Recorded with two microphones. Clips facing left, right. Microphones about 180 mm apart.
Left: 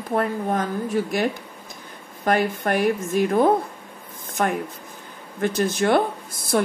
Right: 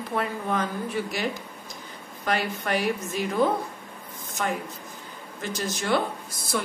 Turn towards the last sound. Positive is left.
turn(degrees=55)  # may be behind; listen again after turning